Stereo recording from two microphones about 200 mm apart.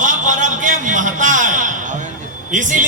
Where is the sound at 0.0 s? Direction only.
40° right (ahead or behind).